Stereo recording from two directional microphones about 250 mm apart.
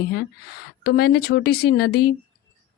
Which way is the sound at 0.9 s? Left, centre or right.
Left.